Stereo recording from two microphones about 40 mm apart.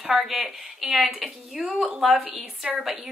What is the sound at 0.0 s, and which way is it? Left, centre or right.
A woman's voice, centre.